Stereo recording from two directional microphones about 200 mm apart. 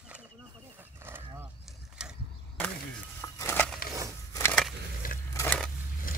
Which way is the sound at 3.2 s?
10° left (ahead or behind).